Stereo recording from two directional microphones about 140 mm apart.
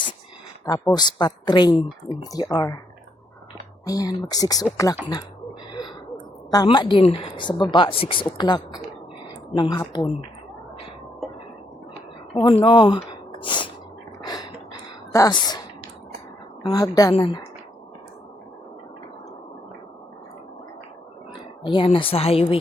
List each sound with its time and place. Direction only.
0.9 s speech: 30° left (ahead or behind)
3.8 s speech: 25° left (ahead or behind)
6.5 s a woman's voice: 30° left (ahead or behind)
12.3 s a woman's voice: 40° left (ahead or behind)
13.4 s gasp: 35° left (ahead or behind)
14.3 s a sound: 30° left (ahead or behind)
15.1 s speech: 25° left (ahead or behind)
16.6 s speech: 25° left (ahead or behind)
21.7 s a woman's voice: 35° left (ahead or behind)